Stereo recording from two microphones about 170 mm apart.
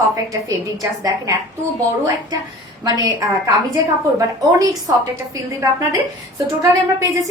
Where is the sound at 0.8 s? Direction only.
20° right (ahead or behind).